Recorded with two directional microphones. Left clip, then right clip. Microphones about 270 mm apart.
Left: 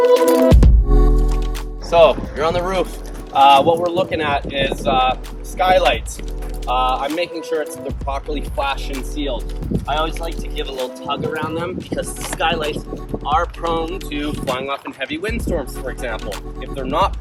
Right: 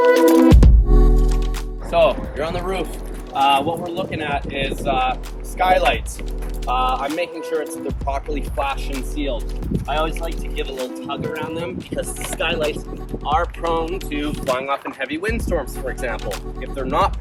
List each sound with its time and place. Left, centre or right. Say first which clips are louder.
0.0 s music: even; centre
1.9 s speech: left 4 dB; centre